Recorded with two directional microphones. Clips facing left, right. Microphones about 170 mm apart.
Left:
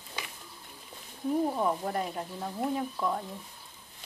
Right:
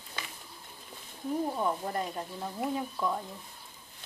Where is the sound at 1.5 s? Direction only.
5° left (ahead or behind).